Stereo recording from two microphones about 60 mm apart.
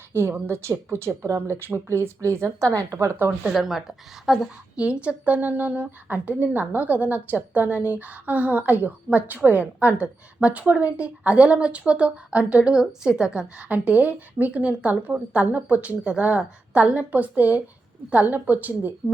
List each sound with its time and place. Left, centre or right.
0.1 s speech: right
3.1 s speech: right
3.5 s a woman's voice: centre
4.8 s speech: centre
13.7 s speech: right